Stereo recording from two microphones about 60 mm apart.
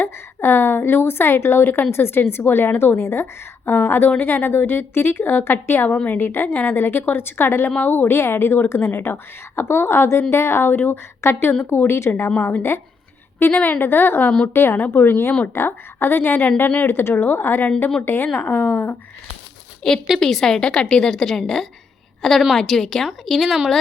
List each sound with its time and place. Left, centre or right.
0.0 s a woman's voice: left
13.4 s a woman's voice: left
14.3 s a woman's voice: centre
14.5 s a woman's voice: left
20.1 s a woman's voice: centre